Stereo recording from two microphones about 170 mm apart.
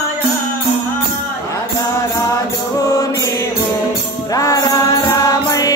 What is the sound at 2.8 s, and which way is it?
Music, 20° left (ahead or behind).